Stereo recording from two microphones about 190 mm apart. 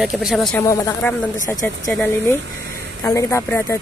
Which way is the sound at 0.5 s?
15° left (ahead or behind).